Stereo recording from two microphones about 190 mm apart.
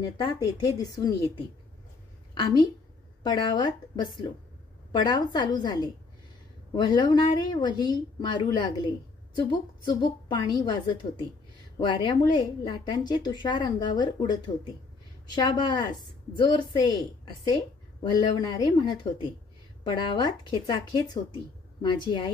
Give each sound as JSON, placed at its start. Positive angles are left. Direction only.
{"t": 0.2, "sound": "a woman's voice", "side_deg": 20}
{"t": 2.4, "sound": "a woman's voice", "side_deg": 20}